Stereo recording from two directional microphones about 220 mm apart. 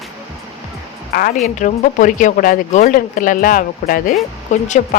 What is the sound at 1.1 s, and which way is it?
Speech, 40° left (ahead or behind).